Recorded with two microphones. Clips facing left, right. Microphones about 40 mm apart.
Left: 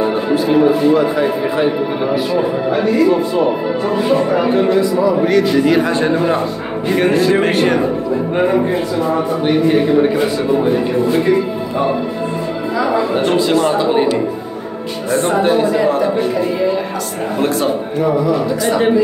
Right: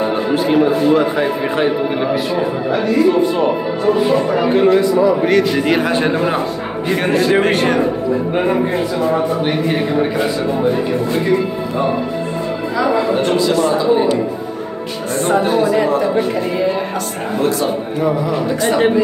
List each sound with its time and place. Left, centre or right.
0.3 s a man's voice: right
4.6 s a man's voice: right
6.1 s a man's voice: centre
6.9 s a man's voice: centre
13.1 s a man's voice: centre
13.5 s speech: left
13.7 s speech: left